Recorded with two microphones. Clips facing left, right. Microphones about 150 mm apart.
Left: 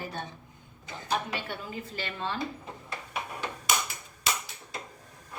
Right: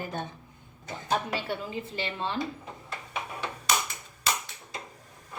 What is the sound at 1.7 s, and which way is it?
Speech, 25° right (ahead or behind).